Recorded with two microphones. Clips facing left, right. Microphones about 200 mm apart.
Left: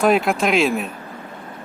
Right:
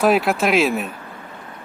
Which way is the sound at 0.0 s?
Centre (ahead or behind).